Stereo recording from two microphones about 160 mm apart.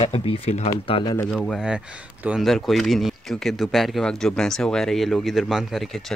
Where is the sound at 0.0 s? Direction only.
35° left (ahead or behind).